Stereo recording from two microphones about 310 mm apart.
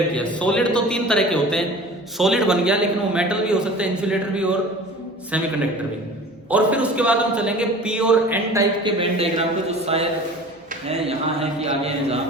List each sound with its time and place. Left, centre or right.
0.3 s a man's voice: centre
6.5 s a man's voice: centre